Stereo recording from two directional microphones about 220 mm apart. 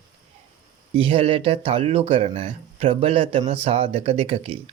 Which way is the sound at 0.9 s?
25° right (ahead or behind).